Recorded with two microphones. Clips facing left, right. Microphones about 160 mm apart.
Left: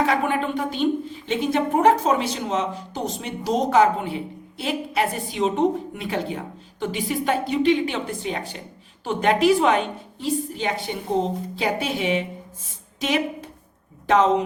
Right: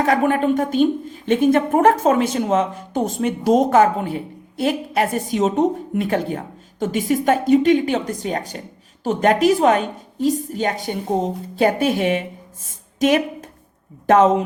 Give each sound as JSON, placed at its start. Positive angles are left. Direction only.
{"t": 0.0, "sound": "a woman's voice", "side_deg": -50}